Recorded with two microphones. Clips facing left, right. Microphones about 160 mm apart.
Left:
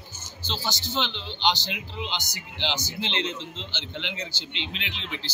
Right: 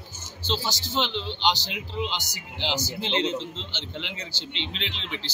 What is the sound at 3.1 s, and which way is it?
Speech, 35° right (ahead or behind).